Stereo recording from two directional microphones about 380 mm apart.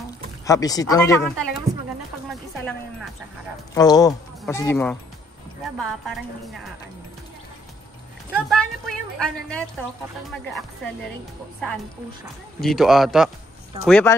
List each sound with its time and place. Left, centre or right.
0.5 s speech: centre
3.7 s a woman's voice: centre
8.4 s a woman's voice: centre
12.5 s a woman's voice: centre